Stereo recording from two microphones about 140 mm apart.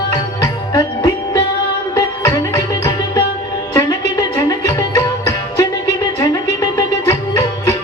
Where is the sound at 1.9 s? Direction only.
25° left (ahead or behind).